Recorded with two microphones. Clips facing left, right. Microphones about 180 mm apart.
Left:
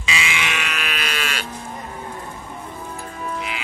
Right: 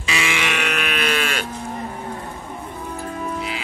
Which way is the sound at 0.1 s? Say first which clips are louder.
Right 2 dB; 55° right (ahead or behind).